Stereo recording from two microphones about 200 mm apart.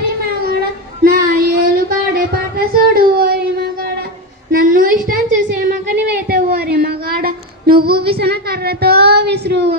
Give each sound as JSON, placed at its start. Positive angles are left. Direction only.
{"t": 1.0, "sound": "child singing", "side_deg": -45}
{"t": 4.5, "sound": "a sound", "side_deg": -45}
{"t": 6.2, "sound": "child singing", "side_deg": -50}
{"t": 8.1, "sound": "speech", "side_deg": -50}